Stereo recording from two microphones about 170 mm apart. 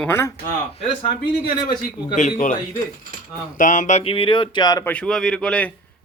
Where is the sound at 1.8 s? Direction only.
50° left (ahead or behind).